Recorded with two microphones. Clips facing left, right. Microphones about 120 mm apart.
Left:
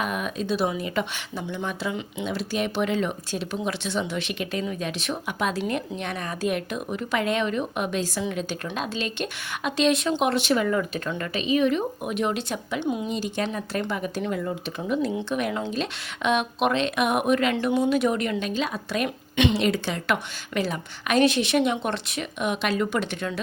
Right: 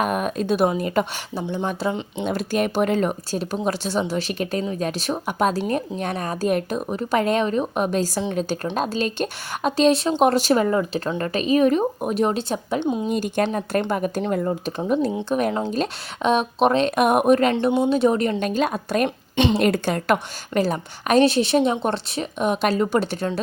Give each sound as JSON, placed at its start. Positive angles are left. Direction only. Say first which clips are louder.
{"t": 0.0, "sound": "speech", "louder": "right 6 dB", "side_deg": -45}
{"t": 2.3, "sound": "speech", "louder": "right 5 dB", "side_deg": -50}
{"t": 13.1, "sound": "speech", "louder": "right 6 dB", "side_deg": -50}
{"t": 17.5, "sound": "speech", "louder": "right 3 dB", "side_deg": -25}
{"t": 19.0, "sound": "a woman's voice", "louder": "even", "side_deg": -30}
{"t": 19.5, "sound": "speech", "louder": "right 5 dB", "side_deg": -50}